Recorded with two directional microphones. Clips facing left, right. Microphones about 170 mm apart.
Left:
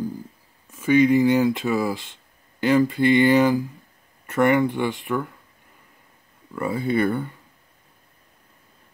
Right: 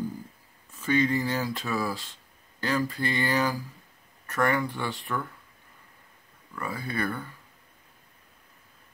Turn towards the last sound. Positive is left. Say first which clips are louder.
# left 10 dB
turn(degrees=25)  # may be behind; listen again after turning